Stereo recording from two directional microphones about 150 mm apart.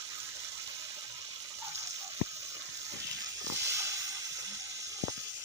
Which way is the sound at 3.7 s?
20° right (ahead or behind).